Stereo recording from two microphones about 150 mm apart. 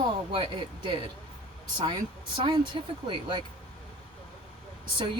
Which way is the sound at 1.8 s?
35° right (ahead or behind).